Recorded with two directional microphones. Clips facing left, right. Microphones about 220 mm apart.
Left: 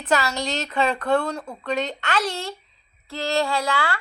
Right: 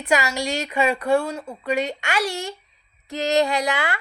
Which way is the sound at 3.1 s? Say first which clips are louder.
Right 3 dB; 20° right (ahead or behind).